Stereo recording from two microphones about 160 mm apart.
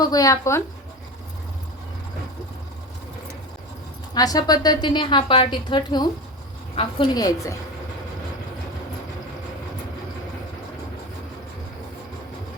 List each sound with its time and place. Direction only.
0.0 s a woman's voice: 25° left (ahead or behind)
4.1 s a woman's voice: 25° left (ahead or behind)